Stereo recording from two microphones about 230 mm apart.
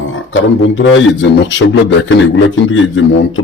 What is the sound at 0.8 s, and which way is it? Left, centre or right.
A man's voice, left.